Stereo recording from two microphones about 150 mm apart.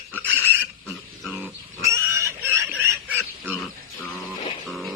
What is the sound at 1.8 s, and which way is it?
Pig, 20° right (ahead or behind).